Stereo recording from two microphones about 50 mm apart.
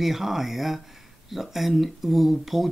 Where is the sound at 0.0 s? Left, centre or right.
Centre.